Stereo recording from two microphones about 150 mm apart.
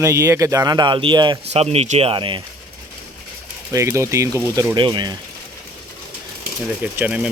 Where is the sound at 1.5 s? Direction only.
45° right (ahead or behind).